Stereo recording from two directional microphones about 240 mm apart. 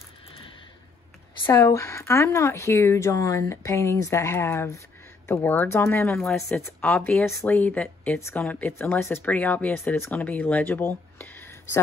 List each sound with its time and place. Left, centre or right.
1.4 s speech: centre